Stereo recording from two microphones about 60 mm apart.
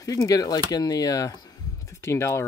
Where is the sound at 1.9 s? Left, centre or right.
Left.